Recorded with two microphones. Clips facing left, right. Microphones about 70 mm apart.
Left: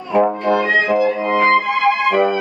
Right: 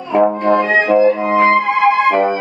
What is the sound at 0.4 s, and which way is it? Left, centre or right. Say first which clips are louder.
Music: right 3 dB; right.